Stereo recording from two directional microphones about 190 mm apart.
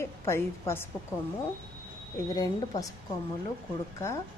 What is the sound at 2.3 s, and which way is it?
Speech, 20° left (ahead or behind).